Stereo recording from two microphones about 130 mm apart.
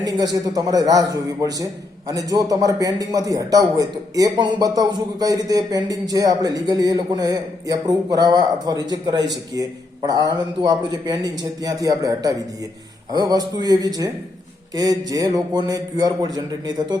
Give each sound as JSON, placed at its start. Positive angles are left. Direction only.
{"t": 0.0, "sound": "a man's voice", "side_deg": -30}